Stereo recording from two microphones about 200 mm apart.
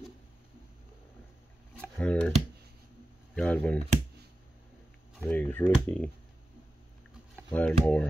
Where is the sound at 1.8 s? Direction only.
5° left (ahead or behind).